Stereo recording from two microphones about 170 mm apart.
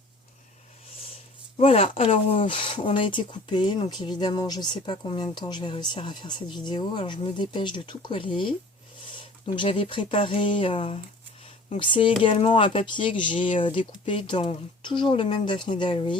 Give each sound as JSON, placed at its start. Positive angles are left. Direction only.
{"t": 1.5, "sound": "speech", "side_deg": 35}